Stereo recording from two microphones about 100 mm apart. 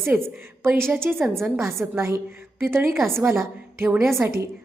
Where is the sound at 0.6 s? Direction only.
20° right (ahead or behind).